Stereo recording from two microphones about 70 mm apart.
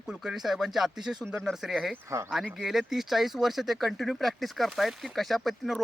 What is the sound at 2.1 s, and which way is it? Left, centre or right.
Speech, right.